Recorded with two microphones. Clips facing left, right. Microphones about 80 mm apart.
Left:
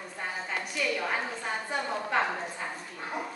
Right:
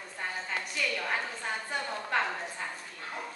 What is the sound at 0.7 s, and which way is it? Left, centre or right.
A woman's voice, centre.